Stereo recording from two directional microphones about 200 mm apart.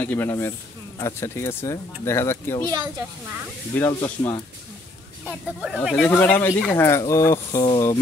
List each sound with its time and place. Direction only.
0.0 s speech: 10° left (ahead or behind)
2.7 s speech: 10° right (ahead or behind)
3.7 s speech: 10° left (ahead or behind)
5.2 s speech: 5° right (ahead or behind)
5.9 s speech: 10° left (ahead or behind)